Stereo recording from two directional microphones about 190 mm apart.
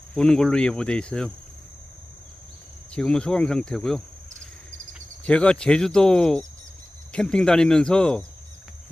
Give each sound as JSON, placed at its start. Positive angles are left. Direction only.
{"t": 0.1, "sound": "cricket", "side_deg": 5}
{"t": 2.9, "sound": "cricket", "side_deg": 5}
{"t": 5.2, "sound": "cricket", "side_deg": 5}